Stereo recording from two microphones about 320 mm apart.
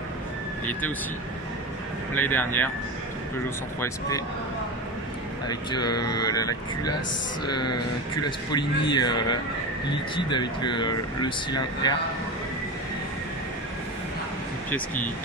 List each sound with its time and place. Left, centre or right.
2.1 s speech: centre
5.5 s speech: centre
7.6 s speech: left
8.5 s speech: centre